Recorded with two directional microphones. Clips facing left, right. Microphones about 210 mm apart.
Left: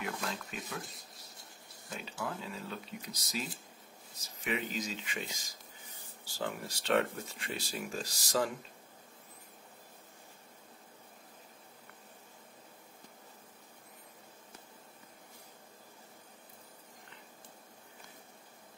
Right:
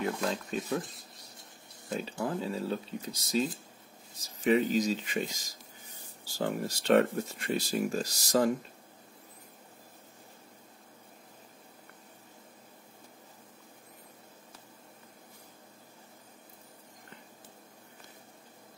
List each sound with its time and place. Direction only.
0.0 s speech: 35° right (ahead or behind)
2.2 s speech: 35° right (ahead or behind)